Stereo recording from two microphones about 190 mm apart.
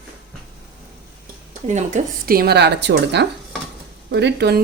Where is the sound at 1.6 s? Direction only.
40° right (ahead or behind); by 4.6 s 60° right (ahead or behind).